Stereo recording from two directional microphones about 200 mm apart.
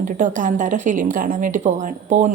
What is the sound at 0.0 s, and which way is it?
A woman's voice, 40° right (ahead or behind).